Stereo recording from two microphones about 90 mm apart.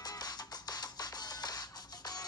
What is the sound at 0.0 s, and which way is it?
Music, 45° left (ahead or behind).